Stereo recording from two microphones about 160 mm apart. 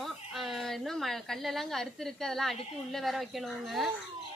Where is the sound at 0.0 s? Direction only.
Centre (ahead or behind).